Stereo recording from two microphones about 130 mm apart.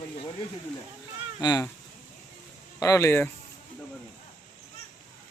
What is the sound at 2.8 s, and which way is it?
Speech, 25° left (ahead or behind).